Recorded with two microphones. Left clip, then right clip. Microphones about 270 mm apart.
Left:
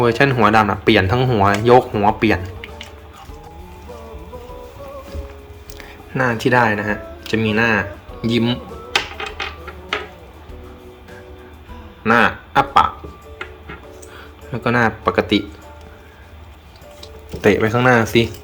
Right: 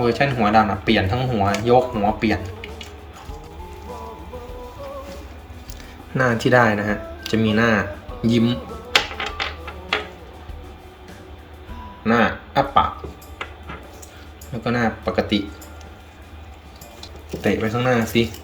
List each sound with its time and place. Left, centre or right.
0.0 s speech: centre
5.7 s speech: centre
12.0 s speech: centre
14.6 s speech: centre
17.4 s speech: centre